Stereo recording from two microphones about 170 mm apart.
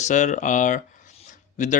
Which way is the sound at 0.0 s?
45° left (ahead or behind).